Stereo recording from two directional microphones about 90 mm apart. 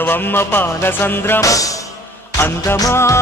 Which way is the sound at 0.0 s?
25° left (ahead or behind).